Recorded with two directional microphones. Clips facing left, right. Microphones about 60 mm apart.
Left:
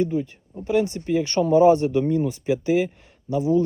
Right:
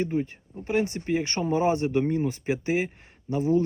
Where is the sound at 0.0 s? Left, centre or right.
Right.